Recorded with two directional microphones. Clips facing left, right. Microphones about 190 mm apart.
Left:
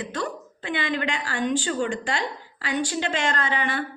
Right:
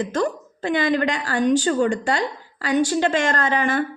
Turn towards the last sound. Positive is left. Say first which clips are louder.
# right 6 dB
turn(degrees=-45)  # may be behind; listen again after turning